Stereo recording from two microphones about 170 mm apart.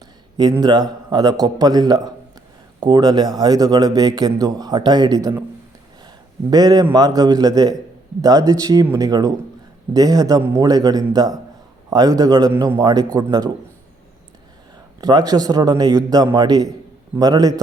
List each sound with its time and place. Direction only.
0.5 s a man's voice: 25° right (ahead or behind)
6.0 s a sound: 25° right (ahead or behind)
6.9 s a man's voice: 20° right (ahead or behind)
15.0 s a man's voice: 20° right (ahead or behind)